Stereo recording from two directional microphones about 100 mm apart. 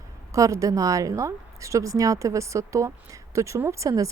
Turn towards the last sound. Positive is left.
turn(degrees=-35)  # may be behind; listen again after turning